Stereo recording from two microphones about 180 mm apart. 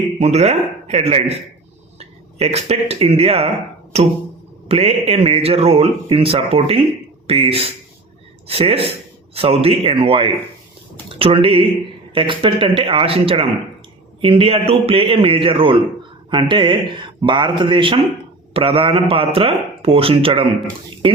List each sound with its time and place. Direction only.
0.2 s speech: 35° right (ahead or behind)